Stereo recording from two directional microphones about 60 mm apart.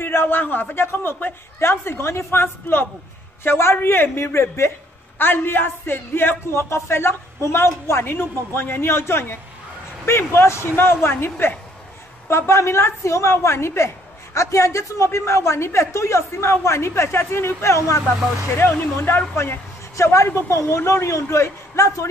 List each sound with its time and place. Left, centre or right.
0.0 s a man's voice: left
5.2 s a man's voice: left
12.3 s a woman's voice: left
18.6 s speech: left
18.9 s a man's voice: left
20.0 s a woman's voice: left